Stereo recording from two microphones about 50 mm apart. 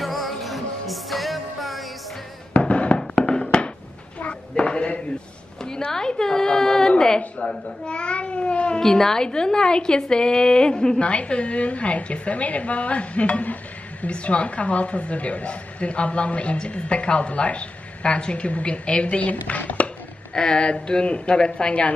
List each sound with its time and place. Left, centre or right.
0.0 s music: centre
2.6 s music: left
4.2 s a sound: left
5.6 s a sound: centre
8.8 s a woman's voice: centre; by 19.9 s left
20.3 s a woman's voice: centre